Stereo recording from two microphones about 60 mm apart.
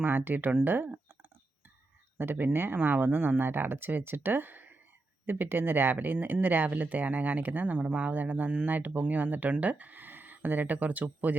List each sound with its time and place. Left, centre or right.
0.0 s speech: right
2.1 s speech: right